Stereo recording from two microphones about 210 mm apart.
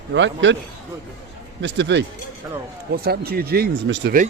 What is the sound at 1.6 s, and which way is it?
Speech, 55° right (ahead or behind).